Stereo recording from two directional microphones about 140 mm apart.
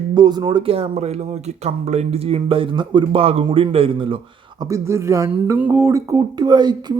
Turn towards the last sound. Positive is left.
turn(degrees=-30)  # may be behind; listen again after turning